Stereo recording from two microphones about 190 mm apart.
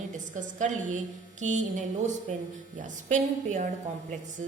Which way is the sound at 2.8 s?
40° right (ahead or behind).